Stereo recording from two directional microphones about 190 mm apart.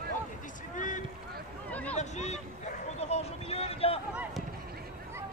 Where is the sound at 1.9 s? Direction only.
35° left (ahead or behind).